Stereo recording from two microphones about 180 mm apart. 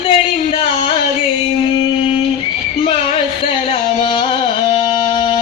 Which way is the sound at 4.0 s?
30° left (ahead or behind).